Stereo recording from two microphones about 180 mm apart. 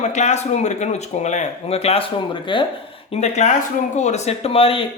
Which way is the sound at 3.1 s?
35° left (ahead or behind).